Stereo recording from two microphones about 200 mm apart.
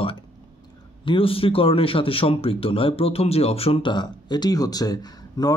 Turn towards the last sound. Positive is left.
turn(degrees=20)  # may be behind; listen again after turning